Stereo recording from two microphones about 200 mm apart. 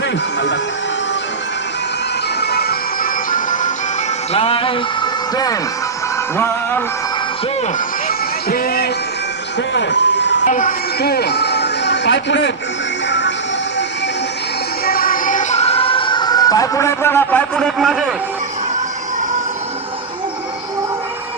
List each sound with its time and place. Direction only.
2.4 s music: 50° left (ahead or behind)
4.3 s music: 25° left (ahead or behind)
6.3 s music: 10° left (ahead or behind)
8.0 s a sound: 45° left (ahead or behind)
9.7 s speech: 60° left (ahead or behind)
10.4 s speech: 40° left (ahead or behind); by 12.5 s 60° left (ahead or behind)
13.1 s music: 60° left (ahead or behind)
14.8 s music: 45° left (ahead or behind); by 17.9 s centre (ahead or behind)